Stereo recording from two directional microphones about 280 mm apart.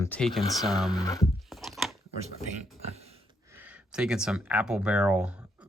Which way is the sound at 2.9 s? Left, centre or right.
Right.